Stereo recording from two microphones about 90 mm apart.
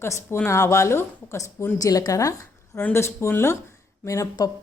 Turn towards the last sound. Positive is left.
turn(degrees=45)  # may be behind; listen again after turning